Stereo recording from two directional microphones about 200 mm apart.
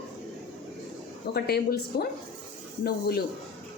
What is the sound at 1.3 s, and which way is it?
A woman's voice, 55° left (ahead or behind).